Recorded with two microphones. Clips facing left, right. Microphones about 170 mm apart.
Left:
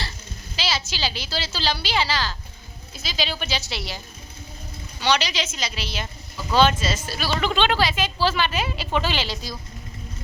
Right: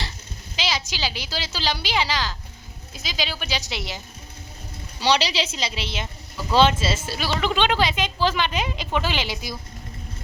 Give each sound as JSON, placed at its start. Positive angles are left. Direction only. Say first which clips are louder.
{"t": 0.5, "sound": "a woman's voice", "louder": "even", "side_deg": -15}
{"t": 4.9, "sound": "a woman's voice", "louder": "right 2 dB", "side_deg": -30}